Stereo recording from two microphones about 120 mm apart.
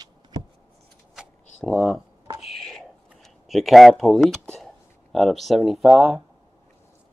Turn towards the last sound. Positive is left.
turn(degrees=-5)  # may be behind; listen again after turning